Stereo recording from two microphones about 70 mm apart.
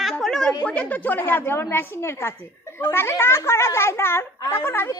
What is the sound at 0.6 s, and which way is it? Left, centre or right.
A woman's voice, centre.